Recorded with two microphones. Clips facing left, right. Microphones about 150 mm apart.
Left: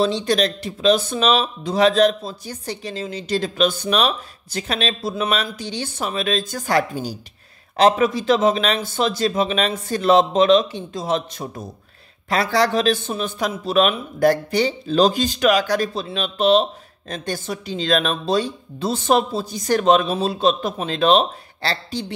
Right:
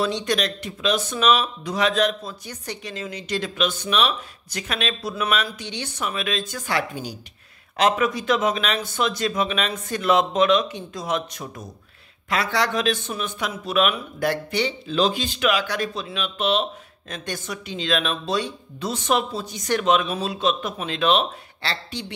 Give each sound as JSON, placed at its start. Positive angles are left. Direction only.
{"t": 0.0, "sound": "speech", "side_deg": 30}